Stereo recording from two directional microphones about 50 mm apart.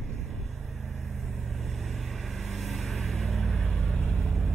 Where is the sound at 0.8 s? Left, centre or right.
Centre.